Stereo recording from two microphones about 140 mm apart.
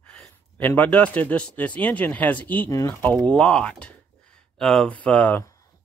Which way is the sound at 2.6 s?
25° left (ahead or behind).